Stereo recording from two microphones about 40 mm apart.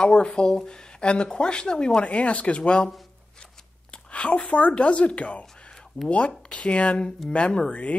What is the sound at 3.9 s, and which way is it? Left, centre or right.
Speech, left.